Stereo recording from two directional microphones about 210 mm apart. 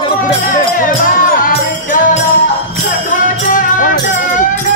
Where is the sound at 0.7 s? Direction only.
40° left (ahead or behind).